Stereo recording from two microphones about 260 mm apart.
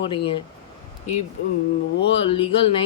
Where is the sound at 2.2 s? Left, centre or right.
Left.